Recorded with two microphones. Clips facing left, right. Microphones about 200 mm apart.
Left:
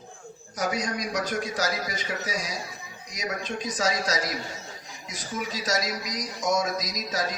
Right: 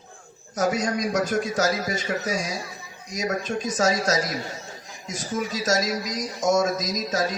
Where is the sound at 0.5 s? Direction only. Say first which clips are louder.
Right 5 dB; 50° right (ahead or behind).